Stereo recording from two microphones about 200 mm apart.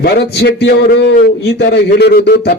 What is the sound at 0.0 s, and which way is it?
A man's voice, 55° left (ahead or behind).